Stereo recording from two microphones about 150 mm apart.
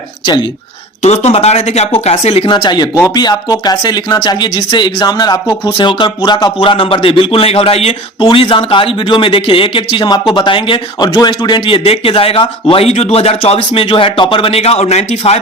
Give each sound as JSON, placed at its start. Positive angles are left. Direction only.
{"t": 1.0, "sound": "speech", "side_deg": 45}